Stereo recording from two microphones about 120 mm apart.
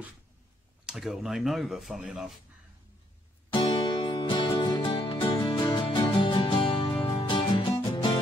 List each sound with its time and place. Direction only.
0.8 s speech: 5° right (ahead or behind)
3.5 s music: 50° left (ahead or behind)